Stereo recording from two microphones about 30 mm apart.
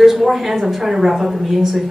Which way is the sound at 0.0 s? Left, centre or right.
Centre.